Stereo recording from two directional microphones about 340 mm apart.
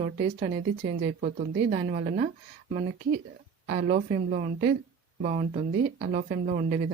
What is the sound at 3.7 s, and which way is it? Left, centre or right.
Speech, right.